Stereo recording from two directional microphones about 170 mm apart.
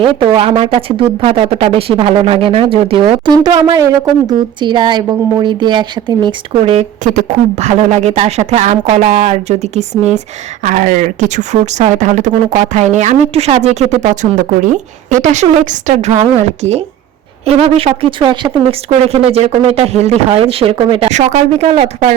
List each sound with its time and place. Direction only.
0.0 s speech: 30° right (ahead or behind)
7.0 s speech: 50° right (ahead or behind)